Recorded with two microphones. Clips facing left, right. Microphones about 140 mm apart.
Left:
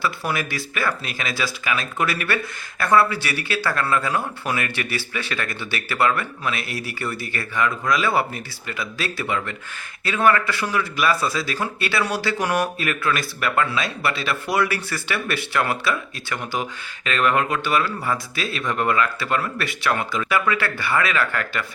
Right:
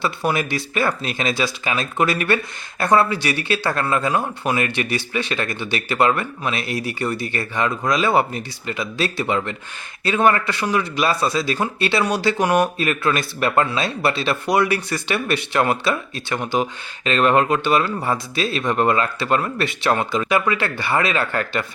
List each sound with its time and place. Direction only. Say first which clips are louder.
0.0 s speech: right 4 dB; 25° right (ahead or behind)